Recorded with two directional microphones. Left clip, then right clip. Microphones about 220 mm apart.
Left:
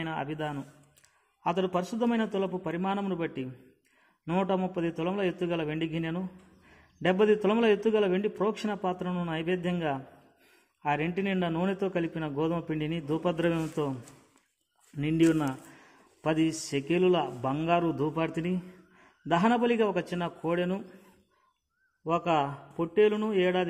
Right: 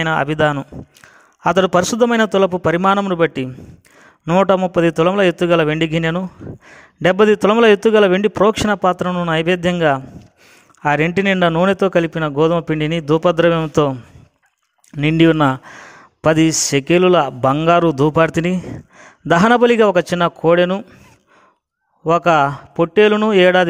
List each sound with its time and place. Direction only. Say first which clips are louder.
0.0 s speech: right 18 dB; 45° right (ahead or behind)
15.0 s speech: right 13 dB; 45° right (ahead or behind)
22.0 s speech: right 14 dB; 45° right (ahead or behind)